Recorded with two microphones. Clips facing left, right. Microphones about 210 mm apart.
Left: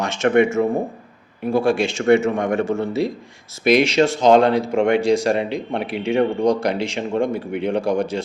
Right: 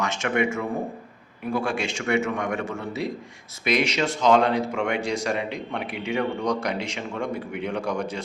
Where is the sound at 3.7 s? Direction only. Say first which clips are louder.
Left 7 dB; 30° left (ahead or behind).